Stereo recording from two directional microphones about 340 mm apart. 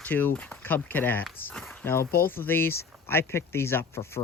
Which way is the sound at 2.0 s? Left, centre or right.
Left.